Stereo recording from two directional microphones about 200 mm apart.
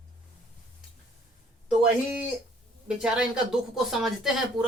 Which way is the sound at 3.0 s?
5° right (ahead or behind).